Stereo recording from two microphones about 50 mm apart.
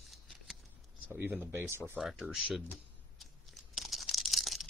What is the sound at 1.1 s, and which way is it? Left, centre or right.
Speech, right.